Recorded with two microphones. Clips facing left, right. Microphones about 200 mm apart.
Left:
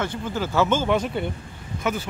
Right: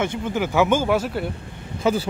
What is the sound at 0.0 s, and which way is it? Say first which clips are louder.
Speech: right 3 dB; 20° right (ahead or behind).